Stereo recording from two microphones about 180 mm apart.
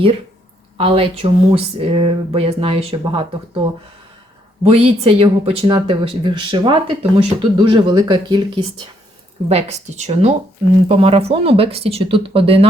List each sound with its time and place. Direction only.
0.8 s speech: 30° right (ahead or behind)
4.6 s speech: 35° right (ahead or behind)
9.5 s speech: 35° right (ahead or behind)